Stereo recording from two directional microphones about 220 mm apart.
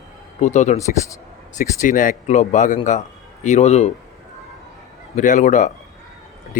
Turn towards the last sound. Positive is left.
turn(degrees=35)  # may be behind; listen again after turning